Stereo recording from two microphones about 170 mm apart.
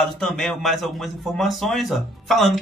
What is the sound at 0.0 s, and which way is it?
A man's voice, 5° left (ahead or behind).